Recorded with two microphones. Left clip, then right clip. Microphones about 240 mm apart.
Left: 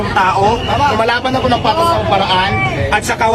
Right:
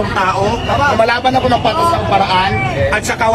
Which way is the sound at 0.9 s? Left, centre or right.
Centre.